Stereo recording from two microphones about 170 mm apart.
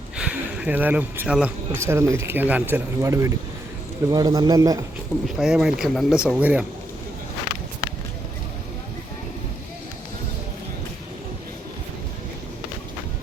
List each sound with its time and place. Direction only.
0.2 s speech: 5° right (ahead or behind)
5.2 s speech: 5° right (ahead or behind)